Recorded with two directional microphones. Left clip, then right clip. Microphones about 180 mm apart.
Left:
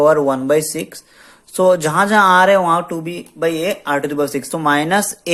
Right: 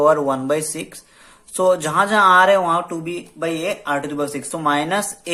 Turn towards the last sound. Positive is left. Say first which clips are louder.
# left 4 dB
turn(degrees=30)  # may be behind; listen again after turning